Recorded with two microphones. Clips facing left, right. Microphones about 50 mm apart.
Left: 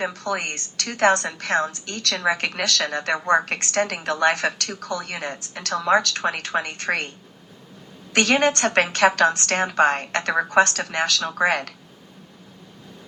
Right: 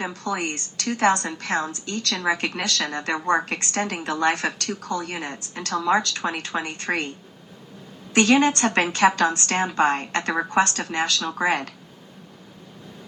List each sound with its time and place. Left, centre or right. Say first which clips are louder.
0.0 s a woman's voice: left 1 dB; left
2.1 s a woman's voice: left 2 dB; left
8.1 s a woman's voice: right 1 dB; left